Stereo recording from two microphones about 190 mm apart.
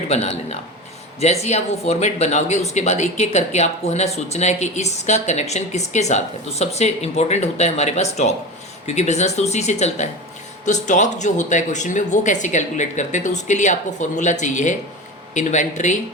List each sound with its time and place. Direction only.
0.1 s speech: 35° left (ahead or behind)